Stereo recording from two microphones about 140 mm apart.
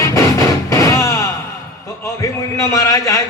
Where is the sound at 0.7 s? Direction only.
20° left (ahead or behind).